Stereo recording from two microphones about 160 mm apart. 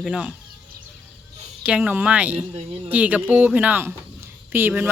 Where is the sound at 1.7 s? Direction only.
10° right (ahead or behind).